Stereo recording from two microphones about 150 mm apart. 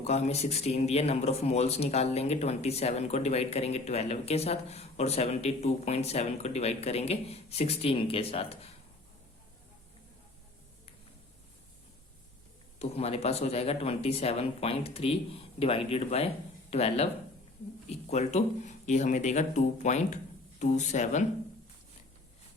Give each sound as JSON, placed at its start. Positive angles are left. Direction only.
{"t": 0.0, "sound": "speech", "side_deg": 45}
{"t": 12.8, "sound": "speech", "side_deg": 45}